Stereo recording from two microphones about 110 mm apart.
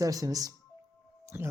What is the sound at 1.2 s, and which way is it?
Music, 25° right (ahead or behind).